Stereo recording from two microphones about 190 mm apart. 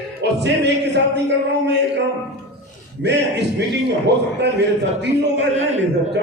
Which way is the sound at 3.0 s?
65° right (ahead or behind).